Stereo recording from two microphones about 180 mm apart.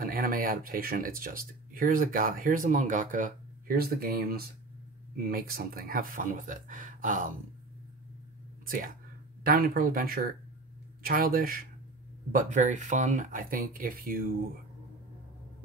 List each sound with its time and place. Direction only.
0.0 s speech: 55° right (ahead or behind)
8.6 s speech: 50° right (ahead or behind)